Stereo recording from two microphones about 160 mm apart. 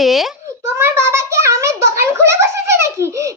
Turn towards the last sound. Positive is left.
turn(degrees=-15)  # may be behind; listen again after turning